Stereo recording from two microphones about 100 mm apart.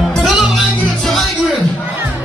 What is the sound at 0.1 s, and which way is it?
Music, centre (ahead or behind).